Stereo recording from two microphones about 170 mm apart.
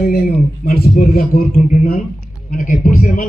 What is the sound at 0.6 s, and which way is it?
A man's voice, 60° left (ahead or behind).